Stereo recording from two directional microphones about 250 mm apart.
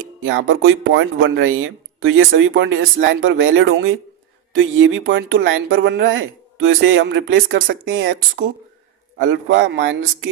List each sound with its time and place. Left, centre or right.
0.2 s speech: right
9.1 s speech: right